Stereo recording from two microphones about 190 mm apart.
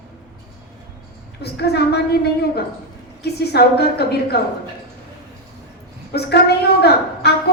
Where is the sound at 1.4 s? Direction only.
60° left (ahead or behind).